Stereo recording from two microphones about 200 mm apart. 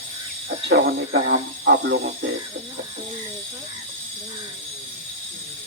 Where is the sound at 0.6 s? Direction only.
60° right (ahead or behind).